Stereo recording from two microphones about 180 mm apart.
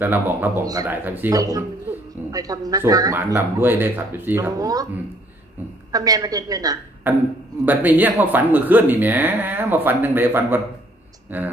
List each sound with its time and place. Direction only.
0.0 s speech: 10° right (ahead or behind)
5.9 s a woman's voice: 20° right (ahead or behind)